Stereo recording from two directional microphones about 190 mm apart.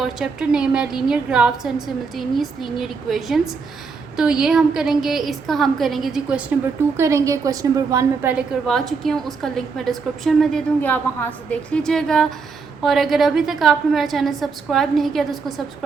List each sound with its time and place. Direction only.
0.0 s a woman's voice: 5° right (ahead or behind)